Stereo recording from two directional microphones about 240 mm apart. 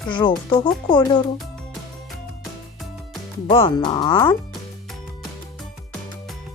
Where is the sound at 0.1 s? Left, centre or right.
Centre.